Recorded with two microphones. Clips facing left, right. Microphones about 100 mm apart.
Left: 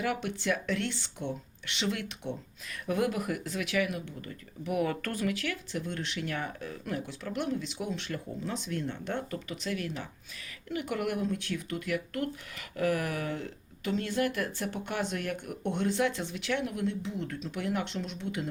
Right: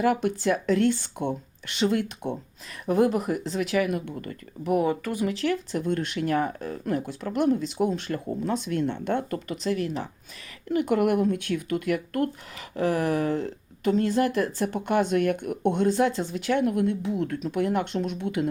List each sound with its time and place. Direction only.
0.0 s speech: 40° right (ahead or behind)
5.2 s speech: 30° right (ahead or behind)
5.7 s speech: 50° right (ahead or behind)
9.6 s speech: 35° right (ahead or behind)
12.5 s speech: 30° right (ahead or behind); by 18.4 s 55° right (ahead or behind)